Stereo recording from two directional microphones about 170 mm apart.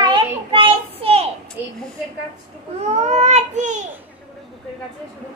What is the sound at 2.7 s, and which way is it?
Speech, 40° right (ahead or behind).